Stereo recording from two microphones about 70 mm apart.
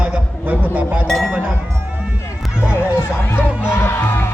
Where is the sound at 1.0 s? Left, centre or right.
Centre.